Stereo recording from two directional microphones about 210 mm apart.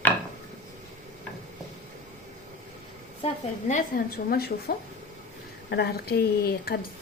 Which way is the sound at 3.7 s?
40° left (ahead or behind).